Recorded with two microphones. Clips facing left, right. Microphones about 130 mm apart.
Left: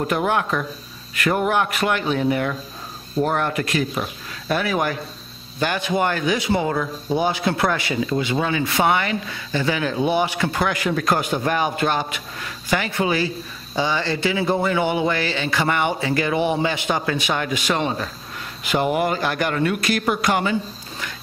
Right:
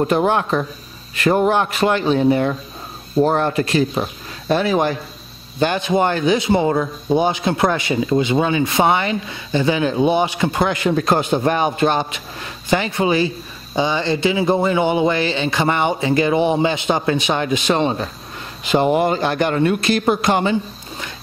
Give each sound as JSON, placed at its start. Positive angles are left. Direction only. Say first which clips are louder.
{"t": 0.0, "sound": "speech", "louder": "right 4 dB", "side_deg": -30}